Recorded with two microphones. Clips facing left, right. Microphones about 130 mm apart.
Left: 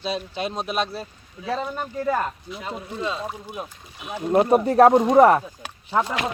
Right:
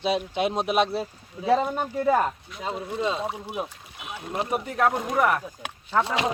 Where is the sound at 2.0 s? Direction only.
10° right (ahead or behind).